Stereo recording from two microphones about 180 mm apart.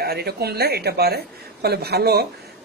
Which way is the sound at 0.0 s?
60° right (ahead or behind).